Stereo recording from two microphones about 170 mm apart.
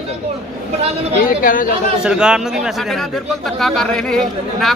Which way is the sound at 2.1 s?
5° right (ahead or behind).